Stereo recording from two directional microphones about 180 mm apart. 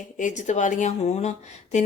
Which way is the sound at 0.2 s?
45° left (ahead or behind).